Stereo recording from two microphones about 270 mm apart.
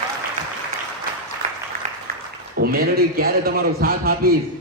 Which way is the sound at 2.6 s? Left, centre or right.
Right.